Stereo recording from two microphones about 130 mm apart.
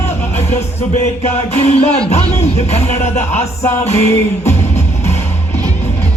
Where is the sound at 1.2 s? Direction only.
50° left (ahead or behind).